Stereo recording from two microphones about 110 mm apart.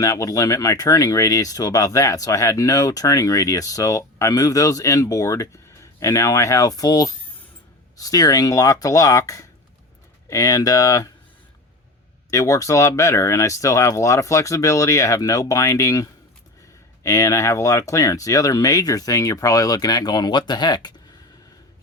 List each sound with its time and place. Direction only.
0.0 s speech: 30° left (ahead or behind)
12.3 s speech: 30° left (ahead or behind)